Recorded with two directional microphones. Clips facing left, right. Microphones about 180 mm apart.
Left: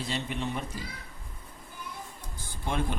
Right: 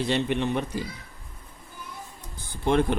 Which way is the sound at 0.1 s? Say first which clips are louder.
Right 7 dB; 65° right (ahead or behind).